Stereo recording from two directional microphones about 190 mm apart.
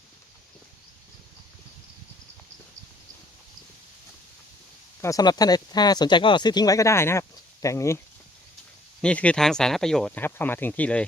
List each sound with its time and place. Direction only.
5.0 s speech: 20° left (ahead or behind)
9.0 s speech: 5° left (ahead or behind)